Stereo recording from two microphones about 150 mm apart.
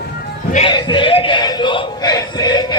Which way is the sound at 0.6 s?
30° left (ahead or behind).